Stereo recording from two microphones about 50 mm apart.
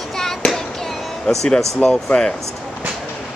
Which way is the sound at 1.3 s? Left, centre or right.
Centre.